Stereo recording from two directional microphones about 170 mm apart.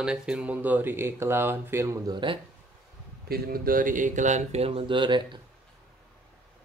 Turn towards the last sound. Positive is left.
turn(degrees=-30)  # may be behind; listen again after turning